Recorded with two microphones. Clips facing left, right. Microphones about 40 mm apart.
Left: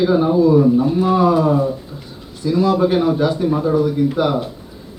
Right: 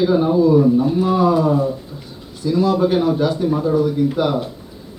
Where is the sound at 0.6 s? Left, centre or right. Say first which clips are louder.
Left 1 dB; left.